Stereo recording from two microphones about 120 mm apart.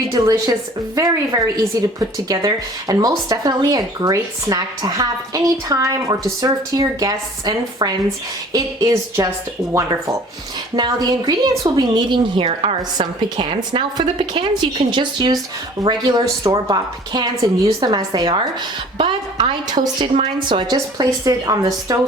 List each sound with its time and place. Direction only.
0.1 s a woman's voice: 30° right (ahead or behind)
20.7 s a woman's voice: 30° right (ahead or behind)